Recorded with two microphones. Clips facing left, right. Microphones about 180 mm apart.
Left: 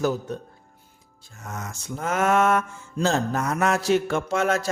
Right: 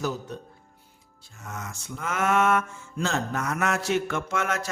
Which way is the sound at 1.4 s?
40° left (ahead or behind).